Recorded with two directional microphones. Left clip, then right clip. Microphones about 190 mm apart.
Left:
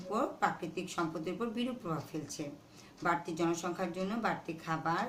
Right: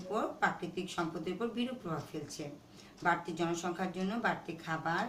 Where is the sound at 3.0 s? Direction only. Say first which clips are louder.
Even; 50° left (ahead or behind).